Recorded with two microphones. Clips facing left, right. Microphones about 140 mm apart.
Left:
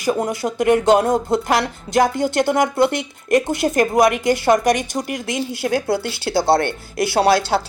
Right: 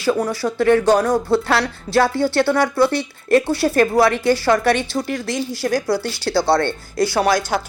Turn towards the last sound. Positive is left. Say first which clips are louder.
# left 2 dB
turn(degrees=30)  # may be behind; listen again after turning